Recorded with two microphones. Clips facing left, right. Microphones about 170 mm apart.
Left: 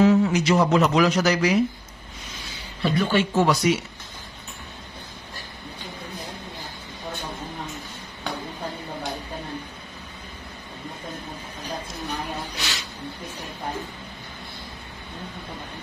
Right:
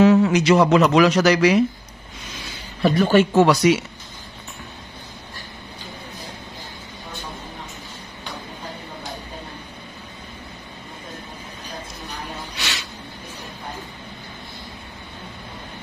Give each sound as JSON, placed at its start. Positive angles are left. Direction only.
{"t": 0.0, "sound": "speech", "side_deg": -90}
{"t": 2.8, "sound": "a woman's voice", "side_deg": -45}
{"t": 3.3, "sound": "speech", "side_deg": -90}